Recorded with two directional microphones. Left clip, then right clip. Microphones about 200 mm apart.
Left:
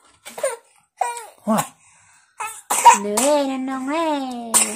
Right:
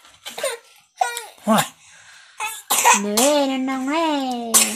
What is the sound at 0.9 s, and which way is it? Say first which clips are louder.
Babbling: right 2 dB; 10° left (ahead or behind).